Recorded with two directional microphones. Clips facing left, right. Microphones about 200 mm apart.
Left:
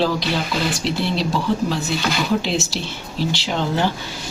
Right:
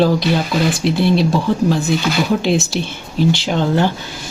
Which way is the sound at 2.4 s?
50° right (ahead or behind).